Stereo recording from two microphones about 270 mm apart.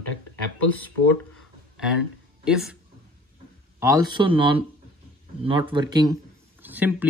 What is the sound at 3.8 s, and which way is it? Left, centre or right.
Speech, centre.